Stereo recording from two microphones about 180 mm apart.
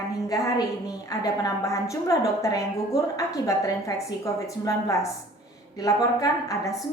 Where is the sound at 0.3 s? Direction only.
20° left (ahead or behind).